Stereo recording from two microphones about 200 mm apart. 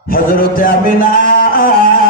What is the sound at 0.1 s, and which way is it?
Music, 45° left (ahead or behind).